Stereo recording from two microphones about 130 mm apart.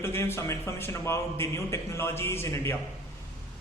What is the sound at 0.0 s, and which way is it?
A man's voice, 20° left (ahead or behind).